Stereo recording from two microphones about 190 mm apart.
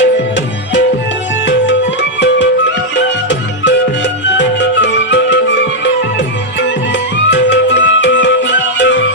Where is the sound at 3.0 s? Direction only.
70° left (ahead or behind).